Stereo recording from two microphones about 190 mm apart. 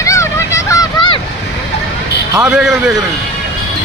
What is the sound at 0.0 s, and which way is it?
Vehicle, 15° left (ahead or behind).